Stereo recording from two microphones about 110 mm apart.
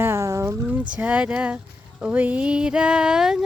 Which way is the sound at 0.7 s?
15° right (ahead or behind).